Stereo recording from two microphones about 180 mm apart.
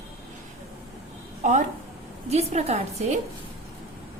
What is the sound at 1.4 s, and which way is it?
A woman's voice, 40° right (ahead or behind).